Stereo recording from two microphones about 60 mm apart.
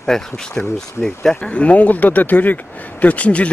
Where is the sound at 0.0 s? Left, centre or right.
Centre.